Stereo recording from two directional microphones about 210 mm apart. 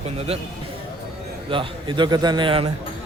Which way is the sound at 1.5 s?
25° right (ahead or behind).